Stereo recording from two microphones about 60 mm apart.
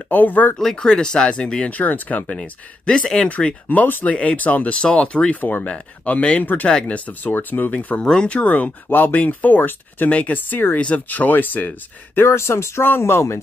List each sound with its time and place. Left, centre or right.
0.1 s speech: left
0.6 s speech: centre; by 7.7 s left
7.7 s speech: left
10.8 s speech: left
12.2 s speech: left